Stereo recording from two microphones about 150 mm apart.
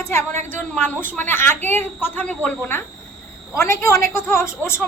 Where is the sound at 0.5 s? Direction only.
10° left (ahead or behind).